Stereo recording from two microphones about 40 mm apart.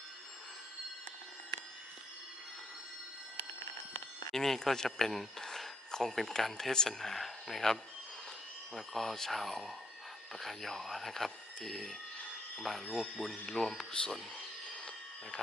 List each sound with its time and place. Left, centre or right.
4.3 s speech: centre